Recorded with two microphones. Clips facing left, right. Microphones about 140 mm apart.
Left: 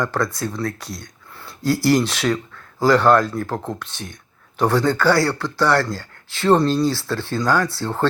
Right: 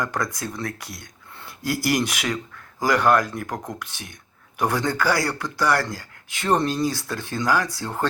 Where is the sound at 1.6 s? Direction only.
20° right (ahead or behind).